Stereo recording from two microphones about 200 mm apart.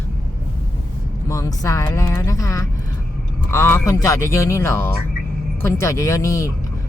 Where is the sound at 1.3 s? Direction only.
15° left (ahead or behind).